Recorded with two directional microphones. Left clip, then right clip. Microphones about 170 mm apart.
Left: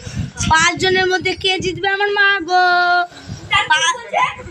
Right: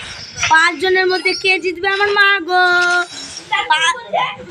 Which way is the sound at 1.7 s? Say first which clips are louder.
Right 2 dB; 5° right (ahead or behind).